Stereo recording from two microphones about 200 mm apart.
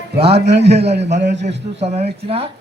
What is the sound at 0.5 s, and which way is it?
A man's voice, 55° right (ahead or behind).